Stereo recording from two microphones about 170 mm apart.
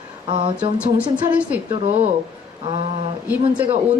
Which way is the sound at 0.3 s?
30° right (ahead or behind).